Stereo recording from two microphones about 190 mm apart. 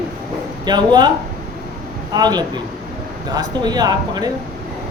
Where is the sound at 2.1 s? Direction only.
20° right (ahead or behind).